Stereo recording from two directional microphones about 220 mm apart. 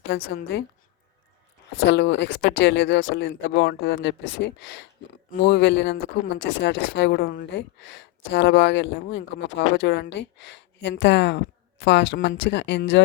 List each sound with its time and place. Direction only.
0.1 s speech: 45° left (ahead or behind)
1.9 s speech: 55° left (ahead or behind)